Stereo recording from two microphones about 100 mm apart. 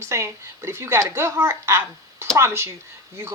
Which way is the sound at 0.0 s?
30° right (ahead or behind).